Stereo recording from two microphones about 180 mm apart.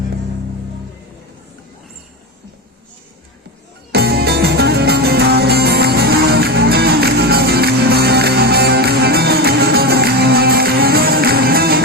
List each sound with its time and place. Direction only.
3.9 s music: 60° right (ahead or behind)